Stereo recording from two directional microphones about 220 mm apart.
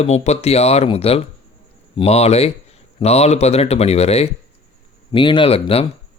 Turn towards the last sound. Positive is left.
turn(degrees=25)  # may be behind; listen again after turning